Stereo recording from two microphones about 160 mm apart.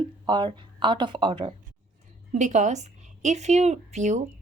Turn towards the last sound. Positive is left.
turn(degrees=-45)  # may be behind; listen again after turning